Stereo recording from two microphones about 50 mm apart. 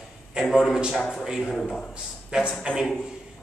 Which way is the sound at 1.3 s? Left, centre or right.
Centre.